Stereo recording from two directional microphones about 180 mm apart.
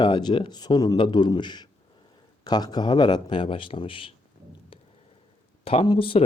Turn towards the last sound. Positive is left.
turn(degrees=30)  # may be behind; listen again after turning